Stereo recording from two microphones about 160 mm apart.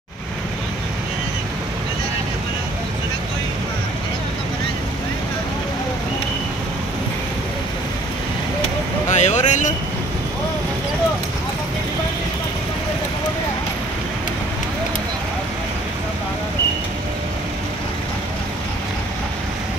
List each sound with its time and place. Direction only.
9.1 s vehicle: 50° left (ahead or behind)